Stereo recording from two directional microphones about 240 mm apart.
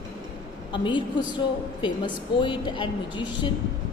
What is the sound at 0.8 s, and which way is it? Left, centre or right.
A man's voice, centre.